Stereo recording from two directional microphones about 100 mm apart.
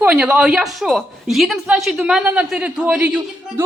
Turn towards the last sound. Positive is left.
turn(degrees=-15)  # may be behind; listen again after turning